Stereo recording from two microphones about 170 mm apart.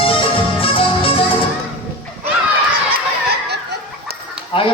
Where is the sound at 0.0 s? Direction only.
30° left (ahead or behind).